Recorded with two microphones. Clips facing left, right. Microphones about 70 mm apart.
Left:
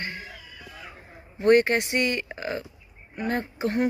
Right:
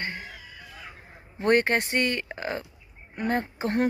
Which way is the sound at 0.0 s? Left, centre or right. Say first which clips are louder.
Right 1 dB; right.